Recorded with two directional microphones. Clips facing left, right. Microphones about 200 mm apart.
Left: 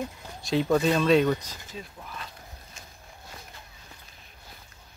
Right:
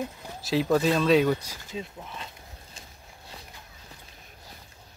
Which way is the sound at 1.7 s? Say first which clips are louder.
Right 5 dB; 25° right (ahead or behind).